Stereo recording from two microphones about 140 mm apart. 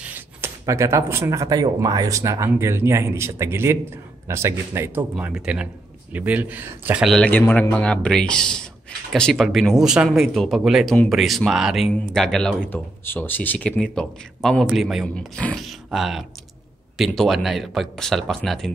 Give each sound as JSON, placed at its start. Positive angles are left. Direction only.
{"t": 0.0, "sound": "speech", "side_deg": -15}
{"t": 5.1, "sound": "speech", "side_deg": -5}
{"t": 7.1, "sound": "a man's voice", "side_deg": 10}